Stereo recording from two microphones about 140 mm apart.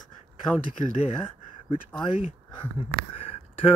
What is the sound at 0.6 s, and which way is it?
Speech, 65° left (ahead or behind).